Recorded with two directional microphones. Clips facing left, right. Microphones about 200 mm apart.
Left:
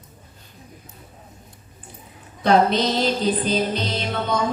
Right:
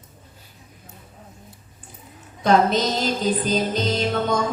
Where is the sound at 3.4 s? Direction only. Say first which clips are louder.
Right 1 dB; 45° right (ahead or behind).